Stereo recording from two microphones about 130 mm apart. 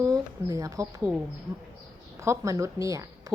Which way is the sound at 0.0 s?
25° right (ahead or behind).